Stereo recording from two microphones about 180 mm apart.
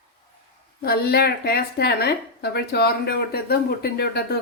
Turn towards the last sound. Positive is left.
turn(degrees=60)  # may be behind; listen again after turning